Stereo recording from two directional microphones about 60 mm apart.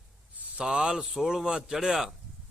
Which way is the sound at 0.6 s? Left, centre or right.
Centre.